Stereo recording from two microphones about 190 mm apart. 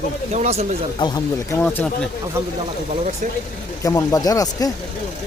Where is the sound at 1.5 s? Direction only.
10° left (ahead or behind).